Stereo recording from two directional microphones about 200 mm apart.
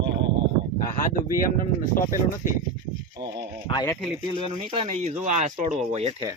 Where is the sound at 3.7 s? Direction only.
20° left (ahead or behind).